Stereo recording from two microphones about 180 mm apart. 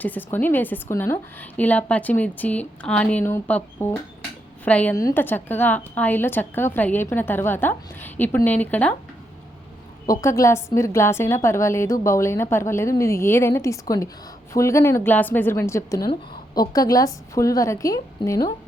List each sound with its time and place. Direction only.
0.0 s a woman's voice: 10° left (ahead or behind)
10.1 s a woman's voice: 20° left (ahead or behind)